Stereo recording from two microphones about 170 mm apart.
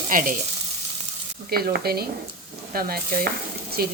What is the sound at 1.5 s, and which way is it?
Stir, 65° right (ahead or behind).